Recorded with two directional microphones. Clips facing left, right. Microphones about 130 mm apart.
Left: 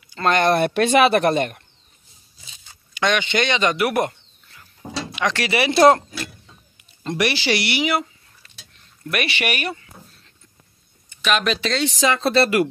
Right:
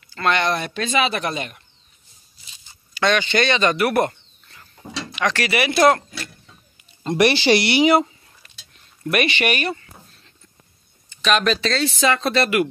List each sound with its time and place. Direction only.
0.2 s speech: 45° left (ahead or behind)
2.9 s speech: 15° left (ahead or behind)
7.2 s speech: 30° right (ahead or behind)
9.1 s speech: 5° left (ahead or behind)
11.2 s speech: 5° left (ahead or behind); by 12.6 s 30° left (ahead or behind)